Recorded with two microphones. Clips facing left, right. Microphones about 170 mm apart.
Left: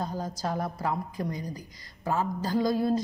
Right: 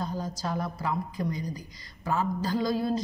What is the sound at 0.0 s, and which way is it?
A woman's voice, 50° left (ahead or behind).